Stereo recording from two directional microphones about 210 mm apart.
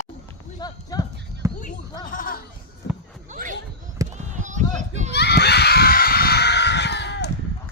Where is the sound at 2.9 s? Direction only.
55° left (ahead or behind).